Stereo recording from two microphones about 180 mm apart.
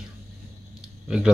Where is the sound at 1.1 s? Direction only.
5° right (ahead or behind).